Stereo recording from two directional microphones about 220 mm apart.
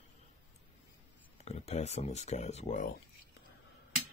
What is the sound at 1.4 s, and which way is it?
Speech, 30° left (ahead or behind).